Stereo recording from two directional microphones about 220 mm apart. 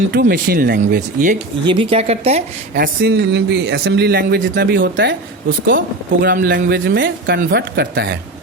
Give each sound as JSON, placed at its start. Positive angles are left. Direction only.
{"t": 0.1, "sound": "speech", "side_deg": -45}
{"t": 1.6, "sound": "speech", "side_deg": -20}
{"t": 2.7, "sound": "speech", "side_deg": -45}
{"t": 6.2, "sound": "speech", "side_deg": -45}